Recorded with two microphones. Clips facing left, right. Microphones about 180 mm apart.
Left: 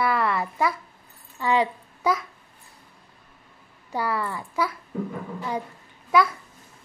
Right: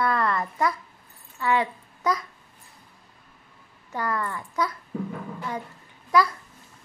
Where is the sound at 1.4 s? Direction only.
15° left (ahead or behind).